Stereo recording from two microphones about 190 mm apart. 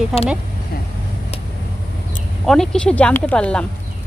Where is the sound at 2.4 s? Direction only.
5° left (ahead or behind).